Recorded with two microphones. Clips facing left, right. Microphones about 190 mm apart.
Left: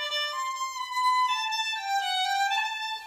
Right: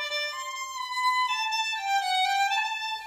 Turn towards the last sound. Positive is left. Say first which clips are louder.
# right 1 dB
turn(degrees=-15)  # may be behind; listen again after turning